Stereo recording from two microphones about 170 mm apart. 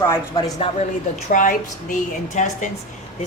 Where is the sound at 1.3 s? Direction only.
50° left (ahead or behind).